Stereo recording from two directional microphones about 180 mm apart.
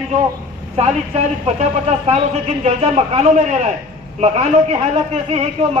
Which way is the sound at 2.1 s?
30° right (ahead or behind).